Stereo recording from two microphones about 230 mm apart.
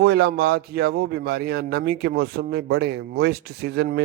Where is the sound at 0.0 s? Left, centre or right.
Right.